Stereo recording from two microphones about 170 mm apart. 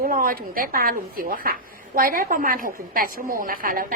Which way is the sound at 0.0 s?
55° right (ahead or behind).